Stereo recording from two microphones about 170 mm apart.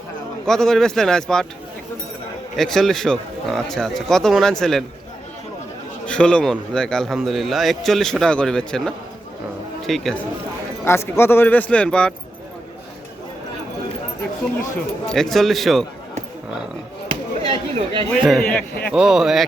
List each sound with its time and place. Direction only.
0.4 s speech: 5° left (ahead or behind)
2.6 s speech: centre (ahead or behind)
6.1 s speech: 5° left (ahead or behind)
10.8 s speech: 15° left (ahead or behind)
14.8 s speech: centre (ahead or behind)
17.1 s chop: 30° right (ahead or behind)
18.1 s speech: centre (ahead or behind)